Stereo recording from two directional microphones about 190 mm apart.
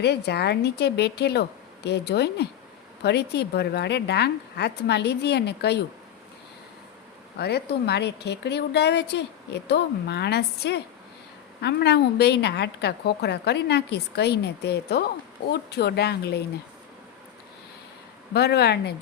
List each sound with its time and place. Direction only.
0.0 s a woman's voice: 60° left (ahead or behind)
7.3 s a woman's voice: 60° left (ahead or behind)
18.3 s a woman's voice: 60° left (ahead or behind)